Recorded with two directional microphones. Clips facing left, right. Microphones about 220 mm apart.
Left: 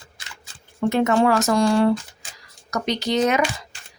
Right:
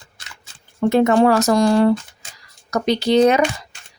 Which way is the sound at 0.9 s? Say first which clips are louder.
Right 4 dB; 35° right (ahead or behind).